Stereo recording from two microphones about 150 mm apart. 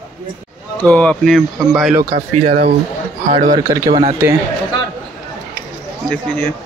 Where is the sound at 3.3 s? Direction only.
55° right (ahead or behind).